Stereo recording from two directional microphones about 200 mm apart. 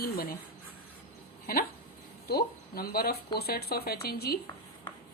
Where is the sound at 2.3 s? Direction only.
50° left (ahead or behind).